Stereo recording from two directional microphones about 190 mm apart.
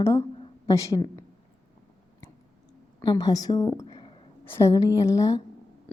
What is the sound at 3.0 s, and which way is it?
A woman's voice, 20° left (ahead or behind).